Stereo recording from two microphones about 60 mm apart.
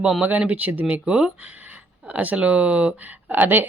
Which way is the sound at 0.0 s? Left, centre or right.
Centre.